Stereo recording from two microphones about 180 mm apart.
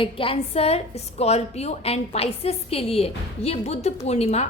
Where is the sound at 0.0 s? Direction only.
30° left (ahead or behind).